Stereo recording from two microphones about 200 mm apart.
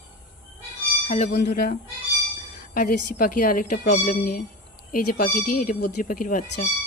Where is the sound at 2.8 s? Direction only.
45° left (ahead or behind).